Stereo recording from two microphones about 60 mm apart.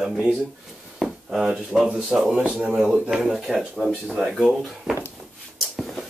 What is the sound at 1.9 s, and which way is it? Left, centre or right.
Speech, centre.